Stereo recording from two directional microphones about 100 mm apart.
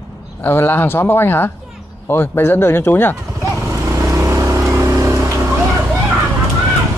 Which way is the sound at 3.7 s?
25° right (ahead or behind).